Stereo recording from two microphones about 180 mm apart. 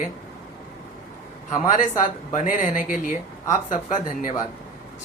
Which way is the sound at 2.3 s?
45° left (ahead or behind).